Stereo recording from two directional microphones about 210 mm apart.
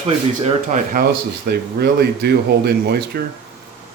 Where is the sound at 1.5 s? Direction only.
50° right (ahead or behind).